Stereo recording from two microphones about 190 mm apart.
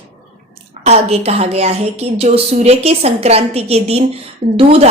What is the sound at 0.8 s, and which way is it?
Speech, 35° right (ahead or behind).